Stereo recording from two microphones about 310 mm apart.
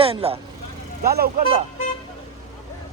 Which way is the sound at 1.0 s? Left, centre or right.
Right.